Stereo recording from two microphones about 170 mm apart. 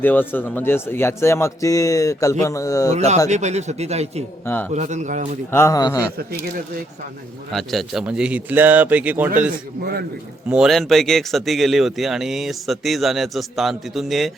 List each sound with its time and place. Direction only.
0.0 s a man's voice: 10° left (ahead or behind)
3.2 s speech: 45° right (ahead or behind)
4.4 s a man's voice: 10° left (ahead or behind)
4.7 s a man's voice: 45° right (ahead or behind)
5.5 s a man's voice: 15° left (ahead or behind)
7.5 s speech: centre (ahead or behind)
9.8 s a man's voice: 65° right (ahead or behind)
10.5 s speech: centre (ahead or behind)